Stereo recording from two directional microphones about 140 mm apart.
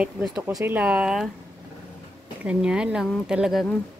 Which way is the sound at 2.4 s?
5° right (ahead or behind).